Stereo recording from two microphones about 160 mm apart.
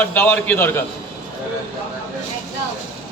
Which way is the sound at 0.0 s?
10° left (ahead or behind).